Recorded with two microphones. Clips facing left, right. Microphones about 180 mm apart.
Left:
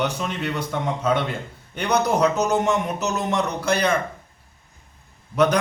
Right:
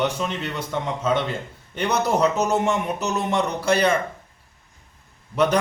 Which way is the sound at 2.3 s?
30° right (ahead or behind).